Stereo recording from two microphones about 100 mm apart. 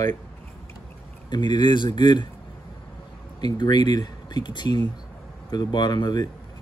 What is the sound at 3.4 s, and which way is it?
Speech, 45° left (ahead or behind).